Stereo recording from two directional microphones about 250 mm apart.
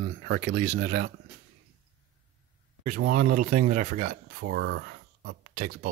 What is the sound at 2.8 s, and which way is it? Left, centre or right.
Speech, right.